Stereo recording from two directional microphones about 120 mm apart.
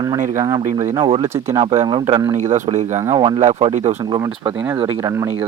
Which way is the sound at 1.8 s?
40° right (ahead or behind).